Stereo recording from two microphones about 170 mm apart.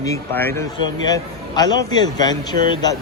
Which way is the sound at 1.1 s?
25° left (ahead or behind).